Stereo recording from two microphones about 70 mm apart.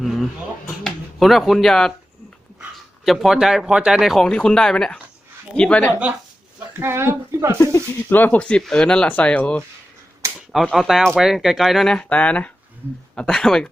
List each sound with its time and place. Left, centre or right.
0.0 s a sound: centre
0.9 s a man's voice: centre
4.2 s speech: centre
6.0 s speech: centre
6.7 s a woman's voice: right
7.9 s speech: left
8.4 s speech: centre
10.3 s speech: centre
11.9 s speech: centre